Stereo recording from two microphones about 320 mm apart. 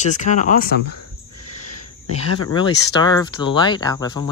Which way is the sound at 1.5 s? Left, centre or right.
Left.